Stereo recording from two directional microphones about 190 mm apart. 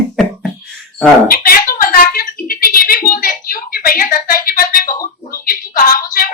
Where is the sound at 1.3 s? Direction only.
50° left (ahead or behind).